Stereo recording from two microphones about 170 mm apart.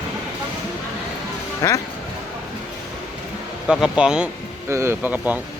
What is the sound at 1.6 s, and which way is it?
Speech, 20° left (ahead or behind).